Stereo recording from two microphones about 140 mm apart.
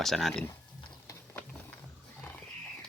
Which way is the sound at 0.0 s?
Centre (ahead or behind).